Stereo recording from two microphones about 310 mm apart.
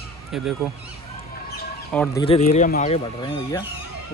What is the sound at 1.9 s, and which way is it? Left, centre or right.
Speech, centre.